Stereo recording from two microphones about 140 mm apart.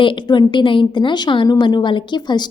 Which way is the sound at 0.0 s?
35° left (ahead or behind).